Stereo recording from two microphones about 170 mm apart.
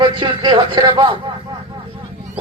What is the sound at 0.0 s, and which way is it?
A man's voice, 25° right (ahead or behind).